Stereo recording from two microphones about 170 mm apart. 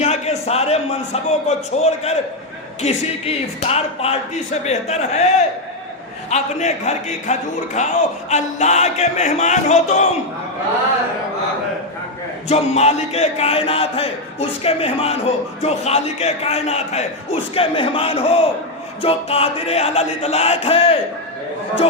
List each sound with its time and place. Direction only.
0.0 s speech: 40° left (ahead or behind)
6.3 s music: 45° left (ahead or behind)
12.5 s speech: 40° left (ahead or behind)